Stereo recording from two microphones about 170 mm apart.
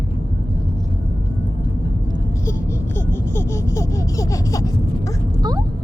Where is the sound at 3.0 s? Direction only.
15° left (ahead or behind).